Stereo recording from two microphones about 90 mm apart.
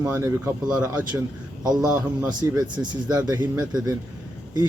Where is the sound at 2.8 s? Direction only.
45° right (ahead or behind).